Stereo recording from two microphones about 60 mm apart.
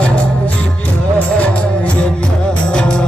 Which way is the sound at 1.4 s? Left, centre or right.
Centre.